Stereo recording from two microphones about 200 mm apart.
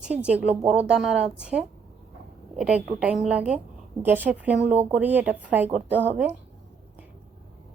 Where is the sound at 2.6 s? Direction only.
5° right (ahead or behind).